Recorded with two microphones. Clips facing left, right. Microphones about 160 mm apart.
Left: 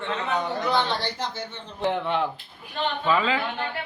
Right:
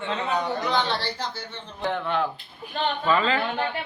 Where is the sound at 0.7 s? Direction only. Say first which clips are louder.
Left 1 dB; 15° left (ahead or behind).